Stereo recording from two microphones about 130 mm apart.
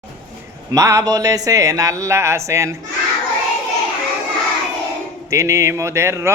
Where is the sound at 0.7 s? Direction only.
25° right (ahead or behind).